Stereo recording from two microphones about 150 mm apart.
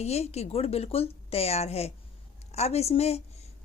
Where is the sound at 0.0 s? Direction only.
45° left (ahead or behind).